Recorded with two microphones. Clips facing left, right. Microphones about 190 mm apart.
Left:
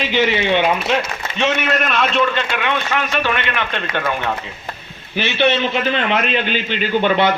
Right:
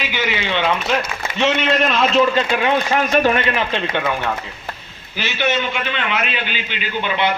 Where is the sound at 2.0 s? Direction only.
35° right (ahead or behind); by 4.1 s 20° right (ahead or behind).